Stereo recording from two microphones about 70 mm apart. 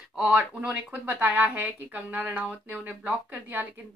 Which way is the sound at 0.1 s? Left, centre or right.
Centre.